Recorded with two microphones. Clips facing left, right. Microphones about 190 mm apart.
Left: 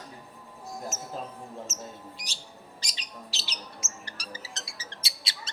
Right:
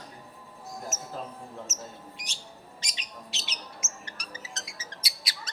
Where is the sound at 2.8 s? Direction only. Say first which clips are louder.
Left 1 dB; 35° left (ahead or behind).